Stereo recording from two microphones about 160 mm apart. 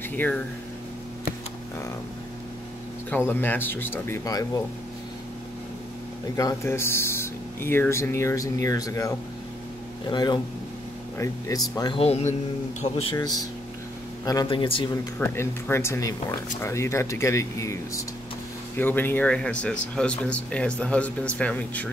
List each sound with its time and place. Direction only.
0.1 s speech: 10° left (ahead or behind)
3.1 s speech: 10° left (ahead or behind)
6.3 s speech: 20° left (ahead or behind)
12.0 s a man's voice: 40° left (ahead or behind)
13.2 s a man's voice: 20° left (ahead or behind)
15.1 s speech: 15° left (ahead or behind)